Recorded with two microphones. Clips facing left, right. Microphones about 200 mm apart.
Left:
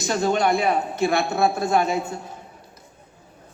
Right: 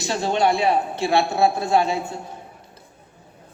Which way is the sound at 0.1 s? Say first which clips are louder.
Even; 45° left (ahead or behind).